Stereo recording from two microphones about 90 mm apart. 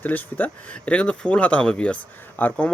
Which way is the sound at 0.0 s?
20° left (ahead or behind).